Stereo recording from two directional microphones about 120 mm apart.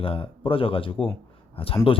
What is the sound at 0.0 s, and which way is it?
Speech, 50° left (ahead or behind).